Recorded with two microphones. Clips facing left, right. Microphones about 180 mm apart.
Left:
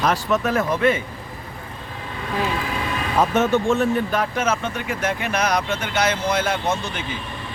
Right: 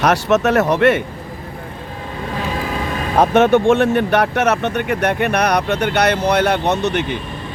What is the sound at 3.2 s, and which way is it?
Speech, 70° right (ahead or behind).